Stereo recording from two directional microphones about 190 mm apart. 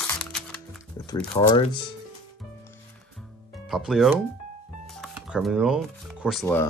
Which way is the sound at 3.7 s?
Centre (ahead or behind).